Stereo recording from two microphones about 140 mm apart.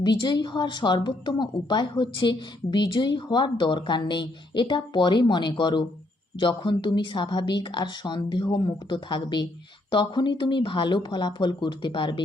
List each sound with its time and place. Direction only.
0.0 s a woman's voice: 30° left (ahead or behind)